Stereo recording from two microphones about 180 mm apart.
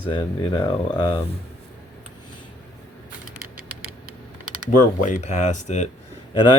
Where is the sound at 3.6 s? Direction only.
55° right (ahead or behind).